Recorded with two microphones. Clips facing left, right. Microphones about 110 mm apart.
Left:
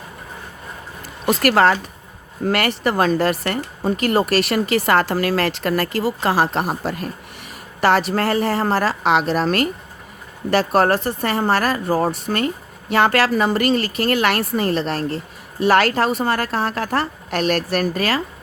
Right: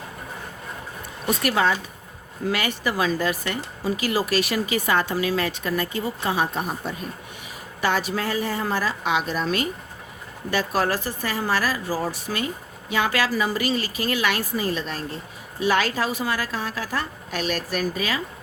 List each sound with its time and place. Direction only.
1.3 s a woman's voice: 70° left (ahead or behind)